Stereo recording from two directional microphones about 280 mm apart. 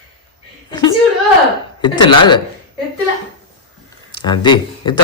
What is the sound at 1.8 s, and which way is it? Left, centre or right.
Speech, centre.